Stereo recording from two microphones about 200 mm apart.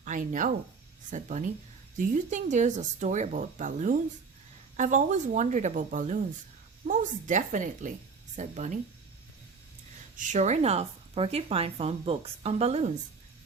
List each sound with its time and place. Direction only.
0.0 s speech: 40° right (ahead or behind)
10.2 s speech: 40° right (ahead or behind)